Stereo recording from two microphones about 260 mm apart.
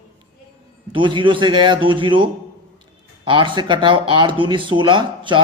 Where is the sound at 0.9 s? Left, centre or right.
Centre.